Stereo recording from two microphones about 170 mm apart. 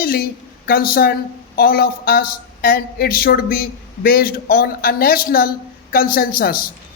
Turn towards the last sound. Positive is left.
turn(degrees=60)  # may be behind; listen again after turning